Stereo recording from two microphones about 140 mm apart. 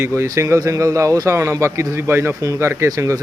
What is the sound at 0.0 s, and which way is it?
A man's voice, 20° right (ahead or behind).